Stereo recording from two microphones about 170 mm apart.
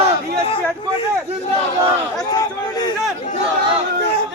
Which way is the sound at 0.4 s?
35° left (ahead or behind).